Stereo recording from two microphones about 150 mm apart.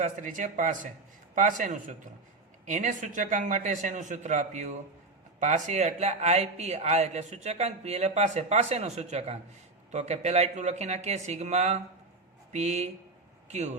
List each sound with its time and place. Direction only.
0.0 s a man's voice: 60° right (ahead or behind)